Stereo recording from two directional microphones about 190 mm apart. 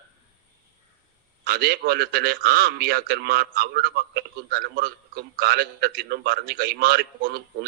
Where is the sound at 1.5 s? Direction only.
55° right (ahead or behind).